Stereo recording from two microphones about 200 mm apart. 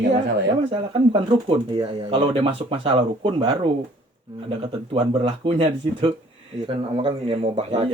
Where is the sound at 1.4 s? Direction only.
25° right (ahead or behind).